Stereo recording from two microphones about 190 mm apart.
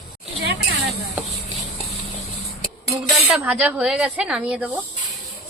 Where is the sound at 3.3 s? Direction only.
5° right (ahead or behind).